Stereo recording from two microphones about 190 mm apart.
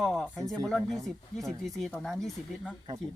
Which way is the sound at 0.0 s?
5° left (ahead or behind).